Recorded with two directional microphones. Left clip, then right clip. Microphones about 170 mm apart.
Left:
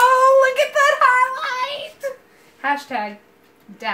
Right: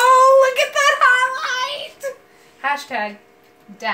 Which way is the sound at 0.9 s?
30° right (ahead or behind).